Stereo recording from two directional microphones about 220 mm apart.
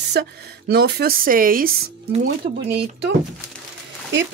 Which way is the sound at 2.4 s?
30° right (ahead or behind).